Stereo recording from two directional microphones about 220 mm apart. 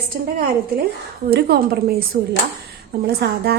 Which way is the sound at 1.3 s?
45° right (ahead or behind).